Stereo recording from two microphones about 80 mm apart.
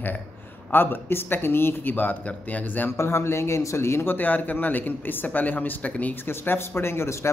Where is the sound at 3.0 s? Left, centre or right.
Left.